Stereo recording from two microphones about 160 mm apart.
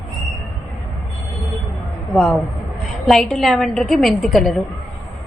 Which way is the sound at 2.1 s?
Centre (ahead or behind).